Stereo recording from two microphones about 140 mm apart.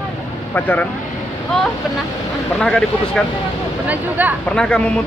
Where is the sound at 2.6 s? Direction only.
5° left (ahead or behind).